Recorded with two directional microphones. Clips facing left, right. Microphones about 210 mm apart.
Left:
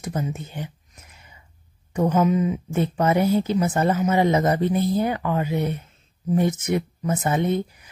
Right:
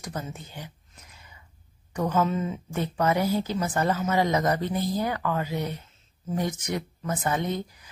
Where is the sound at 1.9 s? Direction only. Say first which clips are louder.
Left 5 dB; 20° left (ahead or behind).